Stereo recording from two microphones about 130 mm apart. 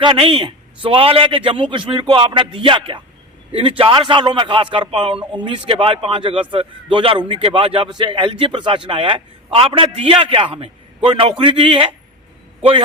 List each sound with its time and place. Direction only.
0.0 s a man's voice: 45° right (ahead or behind)